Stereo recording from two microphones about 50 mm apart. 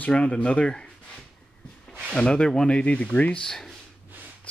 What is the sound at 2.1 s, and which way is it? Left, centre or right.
Speech, centre.